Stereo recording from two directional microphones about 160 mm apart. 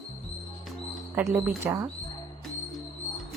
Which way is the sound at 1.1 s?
15° right (ahead or behind).